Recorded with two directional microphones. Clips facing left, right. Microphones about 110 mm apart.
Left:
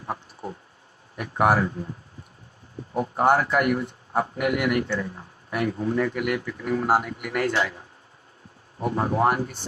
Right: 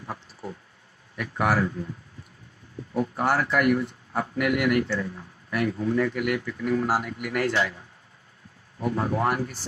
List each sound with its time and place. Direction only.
0.0 s a sound: 25° left (ahead or behind)
1.1 s speech: 30° left (ahead or behind)
2.9 s a man's voice: 25° left (ahead or behind)